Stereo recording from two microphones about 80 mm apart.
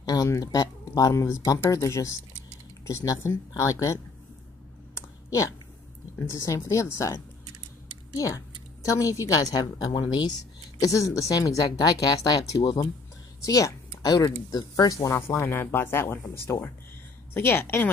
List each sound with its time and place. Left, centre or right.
0.0 s speech: left
6.1 s speech: left
8.8 s speech: left
10.8 s speech: left
13.4 s speech: left
15.0 s speech: left